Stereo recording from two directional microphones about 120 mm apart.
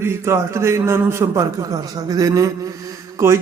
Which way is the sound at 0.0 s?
20° right (ahead or behind).